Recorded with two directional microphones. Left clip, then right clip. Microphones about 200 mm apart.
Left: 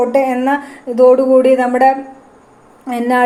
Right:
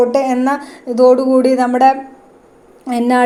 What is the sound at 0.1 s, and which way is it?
A woman's voice, 25° right (ahead or behind).